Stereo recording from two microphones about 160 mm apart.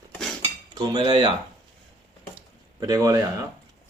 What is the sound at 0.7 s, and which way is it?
Cutlery, 25° right (ahead or behind).